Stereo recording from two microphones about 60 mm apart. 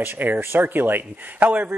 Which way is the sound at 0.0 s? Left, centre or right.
Right.